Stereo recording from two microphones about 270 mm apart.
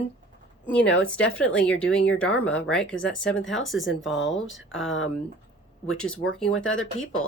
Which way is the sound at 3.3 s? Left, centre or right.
Left.